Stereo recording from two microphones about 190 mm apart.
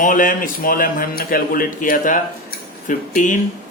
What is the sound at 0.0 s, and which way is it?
Speech, 45° left (ahead or behind).